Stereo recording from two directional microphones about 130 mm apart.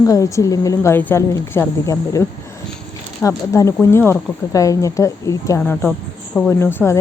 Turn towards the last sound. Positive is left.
turn(degrees=20)  # may be behind; listen again after turning